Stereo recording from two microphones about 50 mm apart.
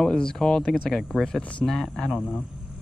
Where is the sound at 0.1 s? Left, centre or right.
Centre.